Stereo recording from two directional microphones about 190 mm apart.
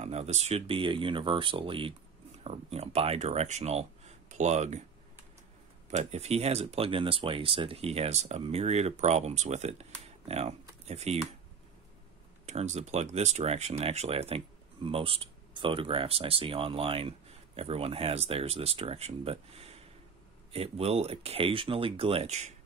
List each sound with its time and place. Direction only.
0.0 s speech: 35° right (ahead or behind)
5.9 s speech: 35° right (ahead or behind)
12.4 s speech: 35° right (ahead or behind)